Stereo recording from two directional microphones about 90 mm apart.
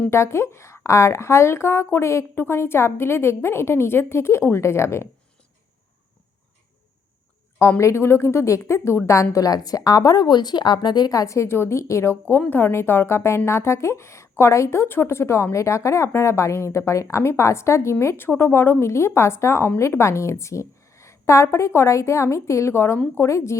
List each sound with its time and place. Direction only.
0.1 s speech: 30° left (ahead or behind)
7.6 s speech: 30° left (ahead or behind)
9.3 s a woman's voice: 40° left (ahead or behind)
12.4 s a woman's voice: 20° left (ahead or behind)